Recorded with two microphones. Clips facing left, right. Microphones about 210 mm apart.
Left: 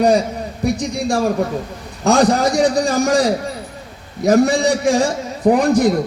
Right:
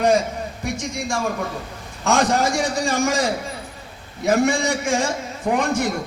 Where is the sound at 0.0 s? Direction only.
35° left (ahead or behind).